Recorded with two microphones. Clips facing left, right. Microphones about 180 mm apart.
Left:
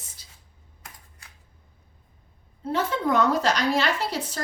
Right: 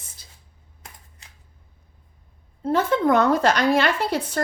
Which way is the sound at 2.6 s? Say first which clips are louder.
Right 6 dB; 50° right (ahead or behind).